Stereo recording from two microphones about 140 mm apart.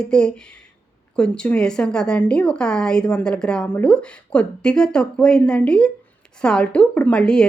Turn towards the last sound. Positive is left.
turn(degrees=5)  # may be behind; listen again after turning